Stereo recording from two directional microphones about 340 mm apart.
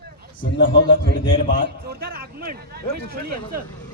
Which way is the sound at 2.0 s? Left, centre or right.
Right.